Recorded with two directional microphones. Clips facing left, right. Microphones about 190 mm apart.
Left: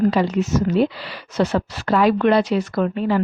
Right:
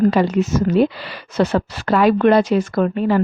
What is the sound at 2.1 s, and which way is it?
Speech, 45° right (ahead or behind).